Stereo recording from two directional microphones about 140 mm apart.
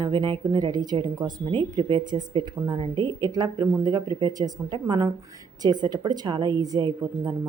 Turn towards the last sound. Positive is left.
turn(degrees=-25)  # may be behind; listen again after turning